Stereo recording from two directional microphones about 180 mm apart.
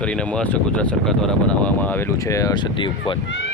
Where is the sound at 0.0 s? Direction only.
5° left (ahead or behind); by 3.2 s 25° left (ahead or behind).